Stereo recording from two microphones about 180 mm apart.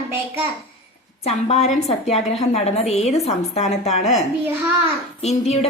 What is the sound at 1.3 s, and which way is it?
A woman's voice, 35° left (ahead or behind).